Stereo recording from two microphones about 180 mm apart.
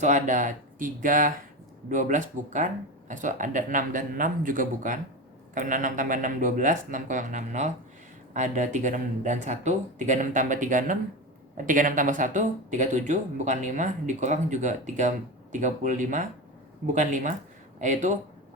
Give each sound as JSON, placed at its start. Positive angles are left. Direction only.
{"t": 0.0, "sound": "speech", "side_deg": -45}